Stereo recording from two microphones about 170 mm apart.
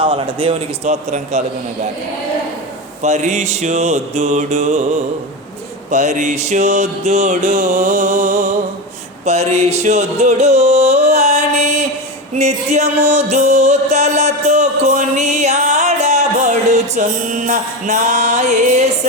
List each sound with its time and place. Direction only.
0.0 s a man's voice: 30° right (ahead or behind)
3.0 s music: 45° right (ahead or behind)
5.9 s music: 45° right (ahead or behind)